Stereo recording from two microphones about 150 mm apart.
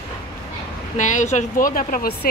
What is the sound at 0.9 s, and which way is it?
Speech, 55° left (ahead or behind).